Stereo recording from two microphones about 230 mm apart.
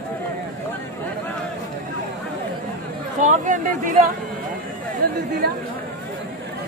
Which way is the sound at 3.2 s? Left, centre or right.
Right.